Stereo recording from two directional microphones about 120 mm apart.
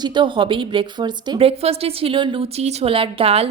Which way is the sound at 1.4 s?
55° right (ahead or behind).